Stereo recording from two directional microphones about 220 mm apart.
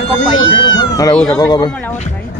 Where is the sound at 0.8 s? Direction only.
15° left (ahead or behind).